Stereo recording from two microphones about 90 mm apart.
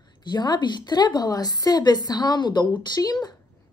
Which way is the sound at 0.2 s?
50° left (ahead or behind).